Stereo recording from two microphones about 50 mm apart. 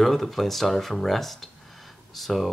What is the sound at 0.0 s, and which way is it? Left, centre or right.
Speech, centre.